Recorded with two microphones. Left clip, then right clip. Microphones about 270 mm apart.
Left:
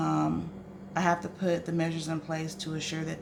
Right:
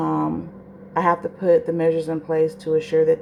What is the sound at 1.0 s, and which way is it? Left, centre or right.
Speech, centre.